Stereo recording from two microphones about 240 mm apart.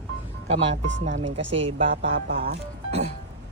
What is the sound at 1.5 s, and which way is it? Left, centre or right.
Speech, right.